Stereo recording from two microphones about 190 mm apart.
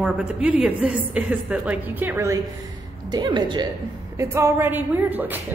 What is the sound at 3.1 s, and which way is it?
A woman's voice, 20° right (ahead or behind).